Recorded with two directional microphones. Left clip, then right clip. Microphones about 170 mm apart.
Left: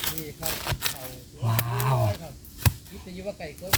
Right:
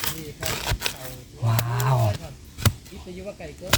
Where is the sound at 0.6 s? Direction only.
Centre (ahead or behind).